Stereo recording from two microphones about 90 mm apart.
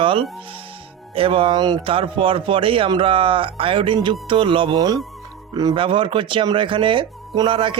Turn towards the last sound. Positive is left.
turn(degrees=-65)  # may be behind; listen again after turning